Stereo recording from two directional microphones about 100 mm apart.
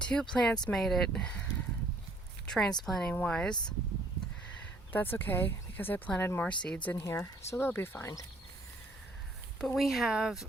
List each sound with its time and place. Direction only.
0.0 s speech: 10° left (ahead or behind)
2.5 s speech: 5° left (ahead or behind)
4.5 s speech: 20° left (ahead or behind)
6.9 s speech: 25° left (ahead or behind)
9.6 s speech: centre (ahead or behind)